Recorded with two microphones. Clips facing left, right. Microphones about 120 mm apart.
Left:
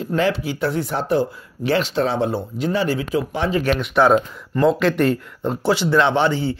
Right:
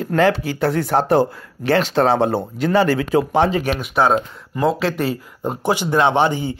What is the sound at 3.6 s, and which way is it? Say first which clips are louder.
Speech: left 1 dB; 10° right (ahead or behind).